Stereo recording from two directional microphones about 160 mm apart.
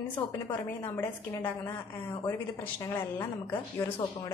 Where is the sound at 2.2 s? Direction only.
15° left (ahead or behind).